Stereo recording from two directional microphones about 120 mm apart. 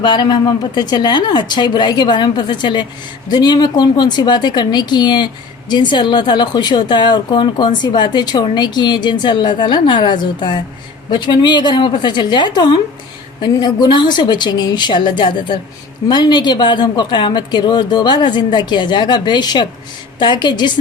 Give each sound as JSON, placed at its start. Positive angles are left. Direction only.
{"t": 0.0, "sound": "a woman's voice", "side_deg": 40}